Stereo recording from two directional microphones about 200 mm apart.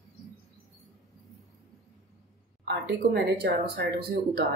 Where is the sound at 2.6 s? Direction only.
60° right (ahead or behind).